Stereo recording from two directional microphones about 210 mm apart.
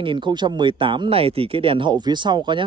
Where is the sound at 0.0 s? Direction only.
20° right (ahead or behind).